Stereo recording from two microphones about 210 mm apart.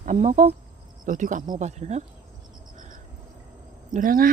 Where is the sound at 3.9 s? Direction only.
40° right (ahead or behind).